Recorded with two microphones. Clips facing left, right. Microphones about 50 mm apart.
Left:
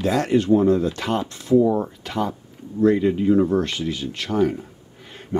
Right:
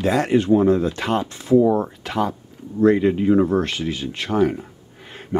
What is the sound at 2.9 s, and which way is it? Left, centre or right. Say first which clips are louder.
Speech: right 1 dB; right.